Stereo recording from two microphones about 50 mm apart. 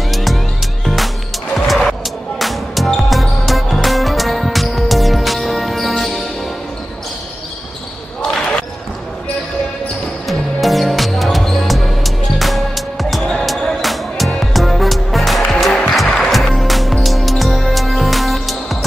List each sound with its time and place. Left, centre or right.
0.1 s music: centre
8.2 s basketball bounce: centre
10.2 s music: centre